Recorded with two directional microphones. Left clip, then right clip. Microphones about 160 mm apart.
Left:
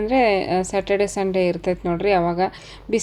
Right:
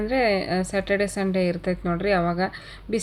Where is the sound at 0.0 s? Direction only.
25° left (ahead or behind).